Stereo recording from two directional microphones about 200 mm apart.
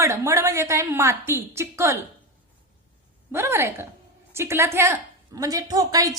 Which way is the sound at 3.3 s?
10° right (ahead or behind).